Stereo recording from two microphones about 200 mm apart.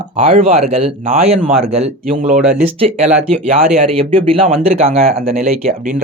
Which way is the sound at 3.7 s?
30° right (ahead or behind).